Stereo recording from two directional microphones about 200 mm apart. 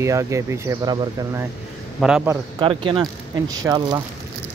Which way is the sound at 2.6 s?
25° right (ahead or behind).